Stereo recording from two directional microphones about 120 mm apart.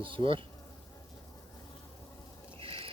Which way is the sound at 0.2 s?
45° right (ahead or behind).